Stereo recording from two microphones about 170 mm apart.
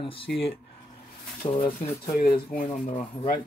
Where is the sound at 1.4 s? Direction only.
30° left (ahead or behind).